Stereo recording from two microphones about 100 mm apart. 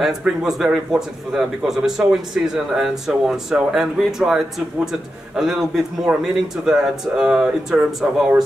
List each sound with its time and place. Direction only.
0.0 s speech: 5° right (ahead or behind)